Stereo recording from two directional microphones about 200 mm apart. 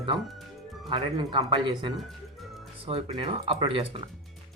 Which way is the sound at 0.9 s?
25° right (ahead or behind).